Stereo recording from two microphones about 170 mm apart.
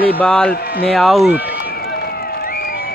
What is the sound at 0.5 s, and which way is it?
Speech, 65° left (ahead or behind).